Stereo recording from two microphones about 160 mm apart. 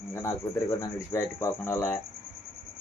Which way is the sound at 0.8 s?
20° left (ahead or behind).